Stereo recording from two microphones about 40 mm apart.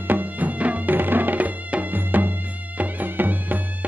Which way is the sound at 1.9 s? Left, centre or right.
Right.